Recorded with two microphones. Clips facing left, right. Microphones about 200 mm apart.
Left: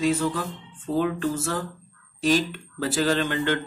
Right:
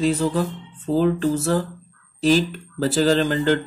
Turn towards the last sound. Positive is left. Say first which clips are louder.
# right 5 dB
turn(degrees=-35)  # may be behind; listen again after turning